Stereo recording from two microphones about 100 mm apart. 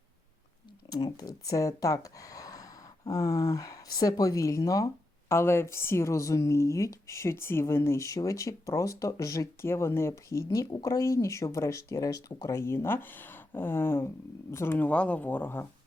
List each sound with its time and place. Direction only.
0.9 s a woman's voice: 40° left (ahead or behind); by 15.6 s 20° left (ahead or behind)